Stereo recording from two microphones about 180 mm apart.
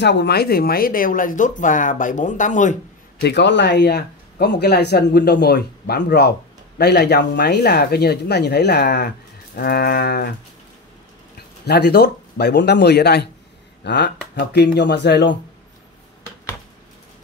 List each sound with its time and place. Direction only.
0.0 s speech: 70° left (ahead or behind); by 2.8 s 45° left (ahead or behind)
3.2 s speech: 70° left (ahead or behind)
11.3 s speech: 65° left (ahead or behind)